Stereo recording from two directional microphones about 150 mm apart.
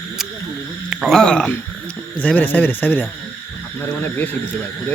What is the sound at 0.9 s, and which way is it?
Speech, centre (ahead or behind).